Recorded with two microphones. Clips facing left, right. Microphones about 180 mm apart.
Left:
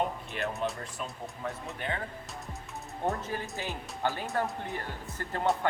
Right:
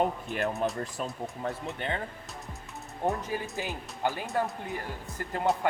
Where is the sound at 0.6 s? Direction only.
45° right (ahead or behind).